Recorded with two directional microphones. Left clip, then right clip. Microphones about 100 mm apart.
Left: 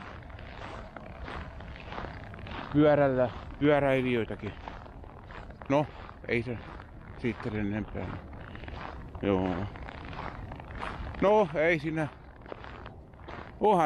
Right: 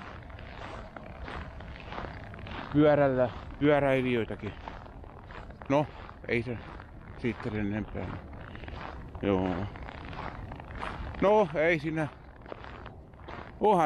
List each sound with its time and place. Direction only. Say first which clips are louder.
0.6 s a sound: even; 35° left (ahead or behind)
2.7 s speech: even; 10° left (ahead or behind)
5.7 s speech: even; centre (ahead or behind)
9.4 s a sound: even; 30° left (ahead or behind)
11.1 s speech: even; 5° left (ahead or behind)
13.6 s speech: even; 10° left (ahead or behind)